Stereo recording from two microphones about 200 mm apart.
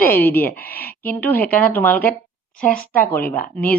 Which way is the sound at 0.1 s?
10° left (ahead or behind).